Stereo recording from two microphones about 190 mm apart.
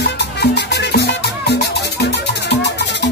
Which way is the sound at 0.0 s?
60° left (ahead or behind).